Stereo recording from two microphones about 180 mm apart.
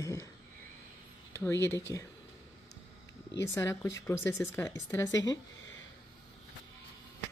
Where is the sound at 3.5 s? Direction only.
15° left (ahead or behind).